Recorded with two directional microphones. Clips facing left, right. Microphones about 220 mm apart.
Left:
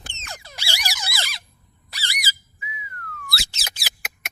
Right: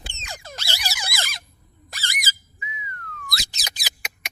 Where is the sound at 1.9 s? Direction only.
50° right (ahead or behind).